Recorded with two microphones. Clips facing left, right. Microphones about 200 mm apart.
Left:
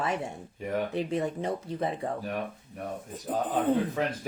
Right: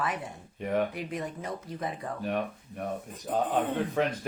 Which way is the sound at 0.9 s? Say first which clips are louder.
Left 6 dB; 25° left (ahead or behind).